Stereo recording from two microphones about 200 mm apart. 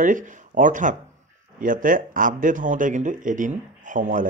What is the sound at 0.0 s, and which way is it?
Speech, 40° right (ahead or behind).